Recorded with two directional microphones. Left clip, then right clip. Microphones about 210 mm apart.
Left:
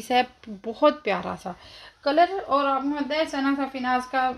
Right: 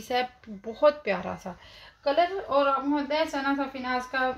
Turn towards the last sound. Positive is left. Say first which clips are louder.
# left 4 dB
turn(degrees=45)  # may be behind; listen again after turning